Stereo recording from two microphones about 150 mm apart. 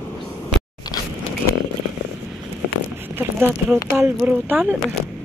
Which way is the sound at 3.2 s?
10° right (ahead or behind).